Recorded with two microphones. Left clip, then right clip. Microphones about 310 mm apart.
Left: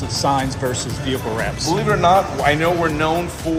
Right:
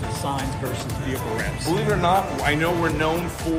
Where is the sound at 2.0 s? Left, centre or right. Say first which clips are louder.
Left 8 dB; left.